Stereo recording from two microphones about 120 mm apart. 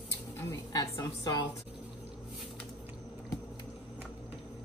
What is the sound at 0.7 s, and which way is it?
Speech, 30° left (ahead or behind).